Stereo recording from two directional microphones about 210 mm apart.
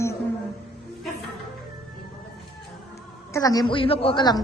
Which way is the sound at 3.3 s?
15° left (ahead or behind).